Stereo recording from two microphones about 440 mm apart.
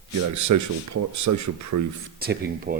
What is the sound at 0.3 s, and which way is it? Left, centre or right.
Speech, right.